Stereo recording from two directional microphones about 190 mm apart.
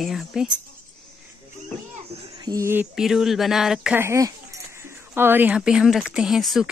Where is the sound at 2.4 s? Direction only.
15° right (ahead or behind).